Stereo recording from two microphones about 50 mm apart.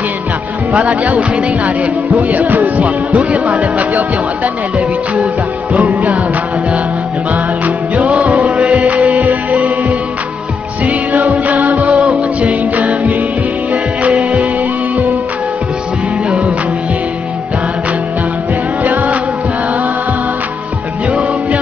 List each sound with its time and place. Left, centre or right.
0.7 s music: right
8.0 s music: right
8.5 s music: centre
9.1 s music: right
18.8 s music: right